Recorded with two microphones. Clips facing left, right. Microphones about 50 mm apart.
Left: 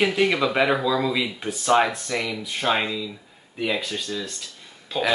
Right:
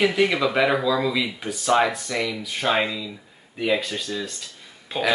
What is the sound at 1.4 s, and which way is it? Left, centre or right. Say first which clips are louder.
Speech: left 1 dB; left.